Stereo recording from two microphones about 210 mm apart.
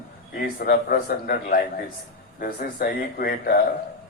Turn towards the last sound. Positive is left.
turn(degrees=45)  # may be behind; listen again after turning